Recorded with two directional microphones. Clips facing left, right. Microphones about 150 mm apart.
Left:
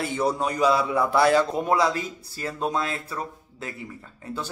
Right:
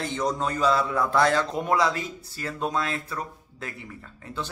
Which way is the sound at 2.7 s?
30° left (ahead or behind).